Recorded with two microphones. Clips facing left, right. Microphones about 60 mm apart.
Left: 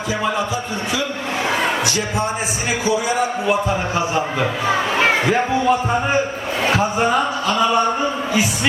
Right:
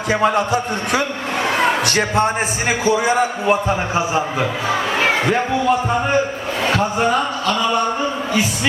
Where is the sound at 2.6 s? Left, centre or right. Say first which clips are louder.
Right 3 dB; right.